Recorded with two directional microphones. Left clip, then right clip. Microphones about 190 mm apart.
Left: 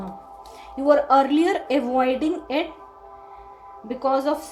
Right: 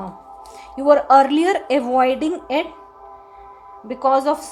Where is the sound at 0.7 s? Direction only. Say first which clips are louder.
Right 4 dB; centre (ahead or behind).